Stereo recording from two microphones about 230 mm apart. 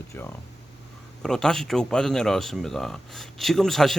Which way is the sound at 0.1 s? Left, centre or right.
Centre.